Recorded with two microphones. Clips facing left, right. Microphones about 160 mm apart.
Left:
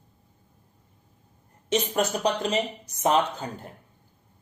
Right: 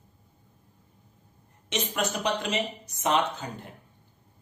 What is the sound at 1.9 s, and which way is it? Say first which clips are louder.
Speech: even; 35° left (ahead or behind).